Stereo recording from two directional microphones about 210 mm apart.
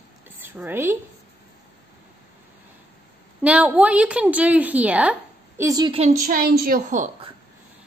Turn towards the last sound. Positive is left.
turn(degrees=-35)  # may be behind; listen again after turning